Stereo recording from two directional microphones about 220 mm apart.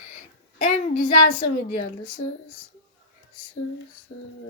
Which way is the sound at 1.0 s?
45° left (ahead or behind).